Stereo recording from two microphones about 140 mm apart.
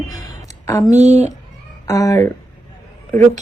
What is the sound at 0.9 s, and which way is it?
Speech, 55° right (ahead or behind).